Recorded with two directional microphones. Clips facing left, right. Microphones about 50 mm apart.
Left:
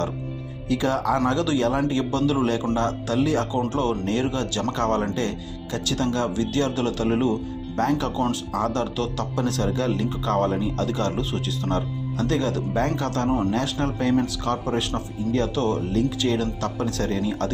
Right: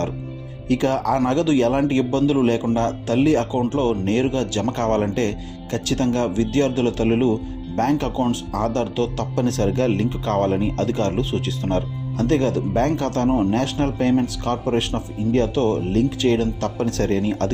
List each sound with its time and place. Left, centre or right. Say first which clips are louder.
0.7 s speech: right 3 dB; right
2.7 s speech: right 3 dB; right